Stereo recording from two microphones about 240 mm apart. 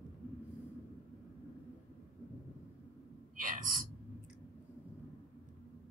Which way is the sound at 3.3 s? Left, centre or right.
Right.